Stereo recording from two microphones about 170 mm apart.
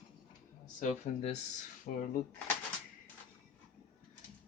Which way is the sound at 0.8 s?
40° left (ahead or behind).